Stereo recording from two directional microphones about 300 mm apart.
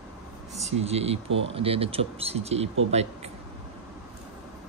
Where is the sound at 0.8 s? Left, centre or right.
Centre.